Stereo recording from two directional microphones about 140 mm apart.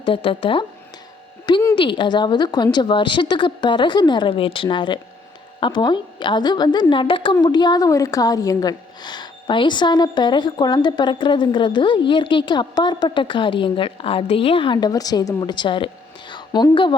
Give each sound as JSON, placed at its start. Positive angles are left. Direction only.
{"t": 0.0, "sound": "a woman's voice", "side_deg": 40}
{"t": 1.7, "sound": "a woman's voice", "side_deg": 35}